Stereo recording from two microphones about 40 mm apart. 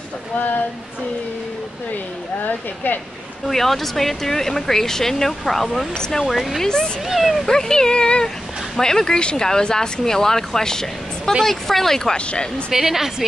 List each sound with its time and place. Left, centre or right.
2.4 s speech: left
3.4 s speech: centre
5.9 s speech: centre
6.2 s speech: centre
7.1 s speech: centre
7.4 s speech: centre
12.3 s speech: left
12.7 s a woman's voice: centre